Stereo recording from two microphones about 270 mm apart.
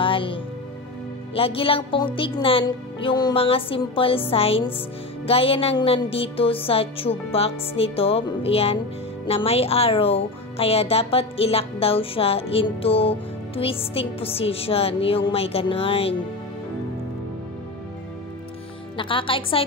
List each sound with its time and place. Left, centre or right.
0.0 s music: centre
1.3 s speech: left
18.9 s speech: centre